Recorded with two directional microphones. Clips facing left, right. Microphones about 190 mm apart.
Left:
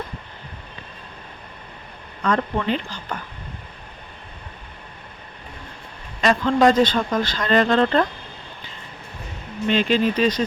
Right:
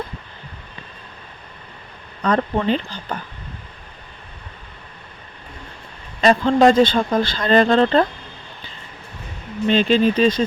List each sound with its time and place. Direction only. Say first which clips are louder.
2.2 s speech: right 3 dB; 35° right (ahead or behind)
6.2 s speech: right 3 dB; 30° right (ahead or behind)
9.6 s speech: right 3 dB; 30° right (ahead or behind)